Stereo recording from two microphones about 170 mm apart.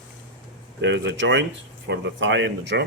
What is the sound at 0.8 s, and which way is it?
Speech, 90° right.